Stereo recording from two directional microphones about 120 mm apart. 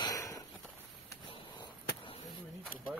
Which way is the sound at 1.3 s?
45° left (ahead or behind).